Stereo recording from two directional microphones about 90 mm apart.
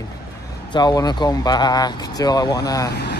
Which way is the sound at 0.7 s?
50° left (ahead or behind).